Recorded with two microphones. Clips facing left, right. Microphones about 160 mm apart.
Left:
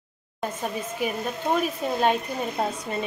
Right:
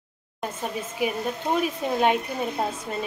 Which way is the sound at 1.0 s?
10° right (ahead or behind).